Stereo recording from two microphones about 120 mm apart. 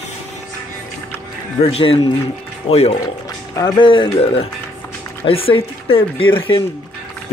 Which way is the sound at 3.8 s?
45° left (ahead or behind).